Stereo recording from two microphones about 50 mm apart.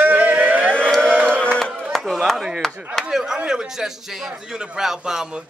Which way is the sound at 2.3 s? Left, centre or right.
Centre.